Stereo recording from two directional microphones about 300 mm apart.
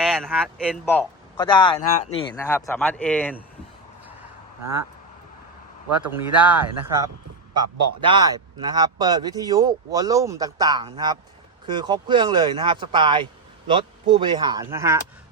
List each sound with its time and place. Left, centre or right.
0.0 s speech: centre
0.9 s a man's voice: centre
6.0 s a man's voice: centre